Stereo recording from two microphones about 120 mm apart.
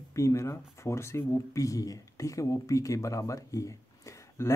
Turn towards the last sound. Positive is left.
turn(degrees=25)  # may be behind; listen again after turning